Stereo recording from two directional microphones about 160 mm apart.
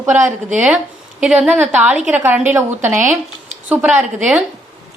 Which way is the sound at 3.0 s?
50° right (ahead or behind).